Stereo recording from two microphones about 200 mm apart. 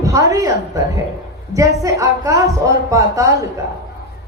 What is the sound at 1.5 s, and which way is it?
A woman's voice, 15° right (ahead or behind).